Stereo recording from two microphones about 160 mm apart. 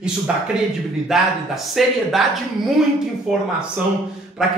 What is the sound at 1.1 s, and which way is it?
A man's voice, 5° right (ahead or behind).